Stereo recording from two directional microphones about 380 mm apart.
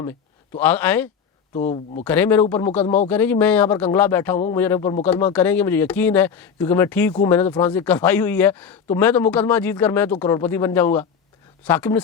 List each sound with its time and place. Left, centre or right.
0.0 s speech: centre
1.5 s speech: centre
2.0 s speech: centre